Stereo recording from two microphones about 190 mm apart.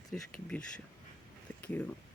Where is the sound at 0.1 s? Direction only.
5° left (ahead or behind).